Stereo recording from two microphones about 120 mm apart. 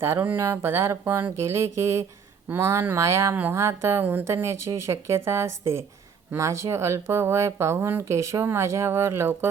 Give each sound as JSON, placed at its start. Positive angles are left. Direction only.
{"t": 0.0, "sound": "speech", "side_deg": -20}